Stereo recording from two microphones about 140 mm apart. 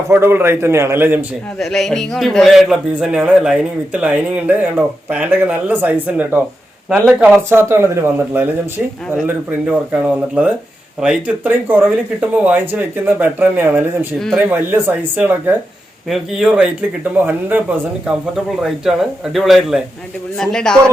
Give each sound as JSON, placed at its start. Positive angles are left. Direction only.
{"t": 0.1, "sound": "a man's voice", "side_deg": -15}
{"t": 1.5, "sound": "a man's voice", "side_deg": 0}